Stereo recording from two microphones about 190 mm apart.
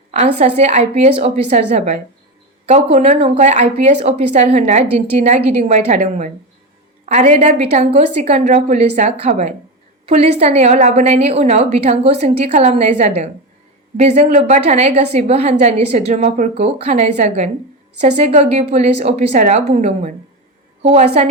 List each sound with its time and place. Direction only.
0.1 s a woman's voice: 35° right (ahead or behind)